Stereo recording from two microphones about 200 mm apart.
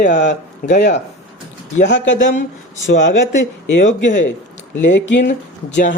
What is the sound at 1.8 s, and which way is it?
Speech, 65° left (ahead or behind).